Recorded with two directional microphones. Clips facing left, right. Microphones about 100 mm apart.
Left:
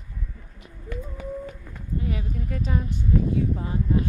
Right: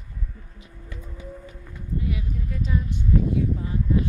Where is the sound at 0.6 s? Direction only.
55° left (ahead or behind).